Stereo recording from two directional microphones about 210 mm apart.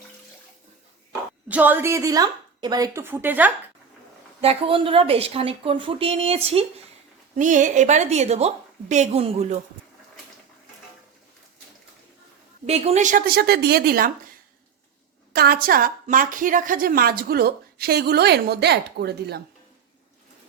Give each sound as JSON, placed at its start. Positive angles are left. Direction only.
{"t": 1.5, "sound": "a woman's voice", "side_deg": -10}
{"t": 4.4, "sound": "a woman's voice", "side_deg": -25}
{"t": 12.6, "sound": "a woman's voice", "side_deg": -30}
{"t": 15.3, "sound": "a woman's voice", "side_deg": -45}